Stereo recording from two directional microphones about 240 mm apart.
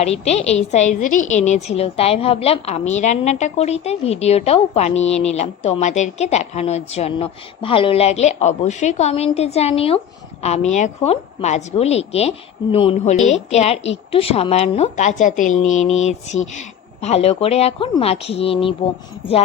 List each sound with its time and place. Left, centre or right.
0.0 s a woman's voice: left